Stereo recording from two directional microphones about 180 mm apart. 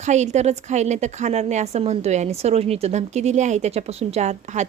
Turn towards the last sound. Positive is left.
turn(degrees=-40)  # may be behind; listen again after turning